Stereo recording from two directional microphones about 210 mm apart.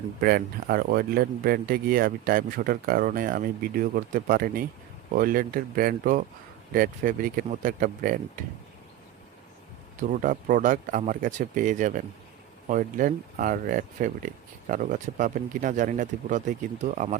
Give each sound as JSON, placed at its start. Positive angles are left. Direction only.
{"t": 0.2, "sound": "speech", "side_deg": -45}
{"t": 10.0, "sound": "speech", "side_deg": -35}